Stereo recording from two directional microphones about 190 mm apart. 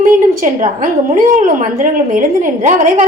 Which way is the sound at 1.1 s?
40° right (ahead or behind).